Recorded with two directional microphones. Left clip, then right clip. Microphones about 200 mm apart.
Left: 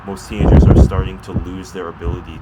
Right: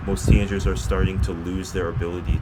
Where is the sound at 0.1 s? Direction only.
20° right (ahead or behind).